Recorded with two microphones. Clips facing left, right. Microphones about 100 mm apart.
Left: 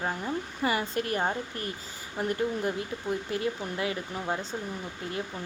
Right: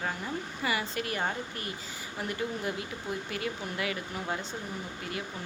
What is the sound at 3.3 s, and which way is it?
Speech, 30° left (ahead or behind).